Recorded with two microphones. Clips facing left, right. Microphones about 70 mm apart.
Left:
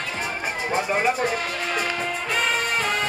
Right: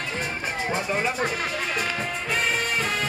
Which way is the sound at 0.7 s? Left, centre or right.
Left.